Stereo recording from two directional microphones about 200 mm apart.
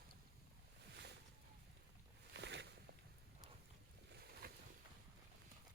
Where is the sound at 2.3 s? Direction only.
60° right (ahead or behind).